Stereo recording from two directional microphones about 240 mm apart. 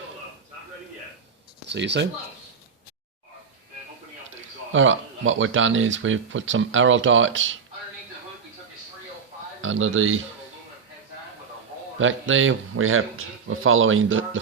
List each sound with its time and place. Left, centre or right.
1.6 s speech: right
4.7 s speech: right
9.6 s speech: right
11.9 s speech: right